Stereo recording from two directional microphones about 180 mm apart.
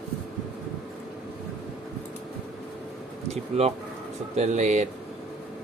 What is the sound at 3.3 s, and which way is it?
Speech, 35° right (ahead or behind).